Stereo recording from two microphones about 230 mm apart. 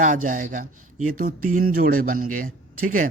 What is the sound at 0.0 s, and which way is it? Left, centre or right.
A man's voice, right.